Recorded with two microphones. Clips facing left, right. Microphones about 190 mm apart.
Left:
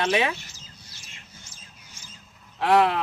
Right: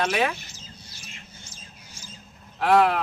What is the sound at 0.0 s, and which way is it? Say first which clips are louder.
Speech: left 1 dB; 25° left (ahead or behind).